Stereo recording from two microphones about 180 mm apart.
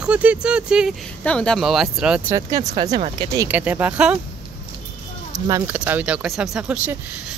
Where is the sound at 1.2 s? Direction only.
5° left (ahead or behind).